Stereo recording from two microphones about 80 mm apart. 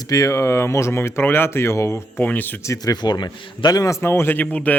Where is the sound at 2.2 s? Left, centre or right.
Left.